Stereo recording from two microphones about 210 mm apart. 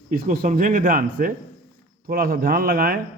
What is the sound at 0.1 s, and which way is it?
A man's voice, 40° right (ahead or behind).